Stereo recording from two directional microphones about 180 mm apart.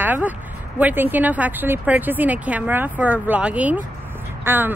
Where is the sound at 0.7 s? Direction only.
10° right (ahead or behind).